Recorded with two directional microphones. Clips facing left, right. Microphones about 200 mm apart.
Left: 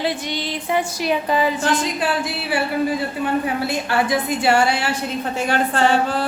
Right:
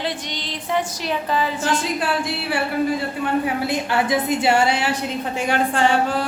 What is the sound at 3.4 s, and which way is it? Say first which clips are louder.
A woman's voice: even; 20° right (ahead or behind).